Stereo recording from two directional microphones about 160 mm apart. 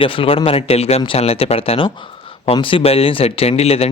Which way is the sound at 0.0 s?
35° left (ahead or behind).